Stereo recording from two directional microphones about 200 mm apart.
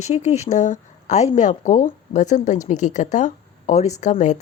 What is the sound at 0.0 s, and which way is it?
A woman's voice, 35° left (ahead or behind).